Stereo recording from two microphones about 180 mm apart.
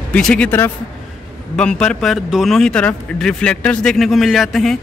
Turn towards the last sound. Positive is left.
turn(degrees=0)  # may be behind; listen again after turning